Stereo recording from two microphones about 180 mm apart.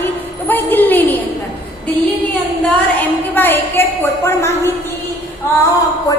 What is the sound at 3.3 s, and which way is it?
A woman's voice, 10° left (ahead or behind).